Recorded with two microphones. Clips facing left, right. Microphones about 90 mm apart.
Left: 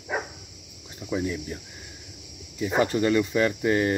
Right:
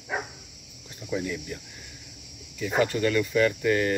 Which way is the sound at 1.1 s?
20° left (ahead or behind).